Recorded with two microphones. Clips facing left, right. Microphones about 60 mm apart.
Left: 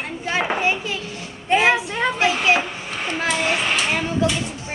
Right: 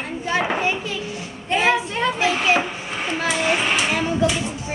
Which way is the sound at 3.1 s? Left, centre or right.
Centre.